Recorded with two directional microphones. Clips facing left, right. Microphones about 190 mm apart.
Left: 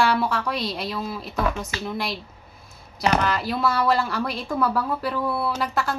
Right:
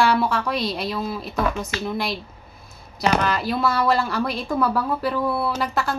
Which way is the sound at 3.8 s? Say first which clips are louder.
Right 1 dB; 20° right (ahead or behind).